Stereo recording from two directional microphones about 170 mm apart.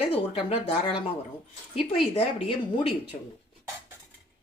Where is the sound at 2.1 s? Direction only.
35° left (ahead or behind).